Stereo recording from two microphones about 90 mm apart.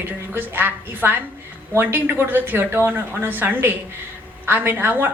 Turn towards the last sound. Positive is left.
turn(degrees=-25)  # may be behind; listen again after turning